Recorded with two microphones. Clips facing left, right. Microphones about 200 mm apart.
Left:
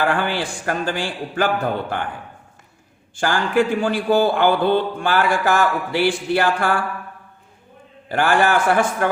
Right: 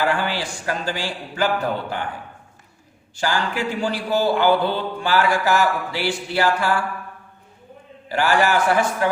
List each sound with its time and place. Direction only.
0.0 s a man's voice: 55° left (ahead or behind)
3.2 s a man's voice: 55° left (ahead or behind)
8.1 s a man's voice: 55° left (ahead or behind)